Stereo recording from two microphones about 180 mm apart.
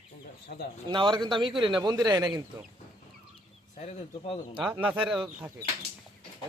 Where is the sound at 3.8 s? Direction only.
40° left (ahead or behind).